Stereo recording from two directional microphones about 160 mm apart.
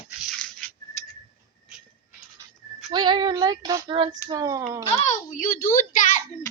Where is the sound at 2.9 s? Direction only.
30° right (ahead or behind).